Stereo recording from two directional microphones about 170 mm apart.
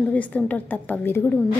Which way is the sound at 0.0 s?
10° left (ahead or behind).